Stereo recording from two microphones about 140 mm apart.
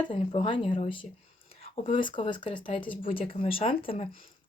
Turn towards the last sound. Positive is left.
turn(degrees=40)  # may be behind; listen again after turning